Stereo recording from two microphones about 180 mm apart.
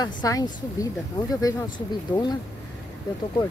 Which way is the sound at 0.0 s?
20° left (ahead or behind).